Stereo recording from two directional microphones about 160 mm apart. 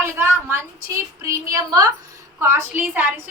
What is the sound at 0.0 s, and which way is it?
A woman's voice, 15° right (ahead or behind).